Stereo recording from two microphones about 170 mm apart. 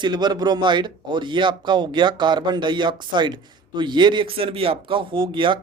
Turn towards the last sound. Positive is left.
turn(degrees=-30)  # may be behind; listen again after turning